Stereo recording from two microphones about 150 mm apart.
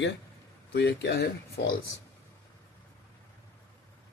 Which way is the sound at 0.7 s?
90° left.